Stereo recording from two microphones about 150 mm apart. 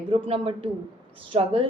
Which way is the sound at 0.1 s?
40° right (ahead or behind).